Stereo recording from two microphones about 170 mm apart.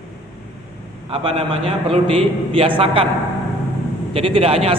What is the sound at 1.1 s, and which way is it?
A man's voice, 35° right (ahead or behind).